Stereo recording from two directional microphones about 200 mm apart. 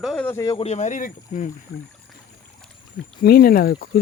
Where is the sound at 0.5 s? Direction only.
30° left (ahead or behind).